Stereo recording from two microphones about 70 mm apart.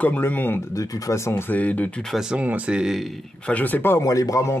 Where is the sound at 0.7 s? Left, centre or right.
Left.